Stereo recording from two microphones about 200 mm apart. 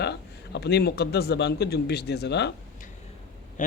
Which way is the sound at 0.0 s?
55° left (ahead or behind).